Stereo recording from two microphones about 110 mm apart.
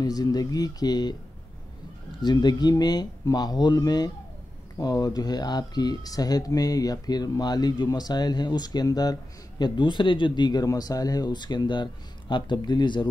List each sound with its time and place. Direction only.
0.0 s speech: 35° left (ahead or behind)
2.2 s speech: 40° left (ahead or behind)